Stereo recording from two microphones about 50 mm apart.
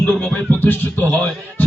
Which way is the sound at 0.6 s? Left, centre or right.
Left.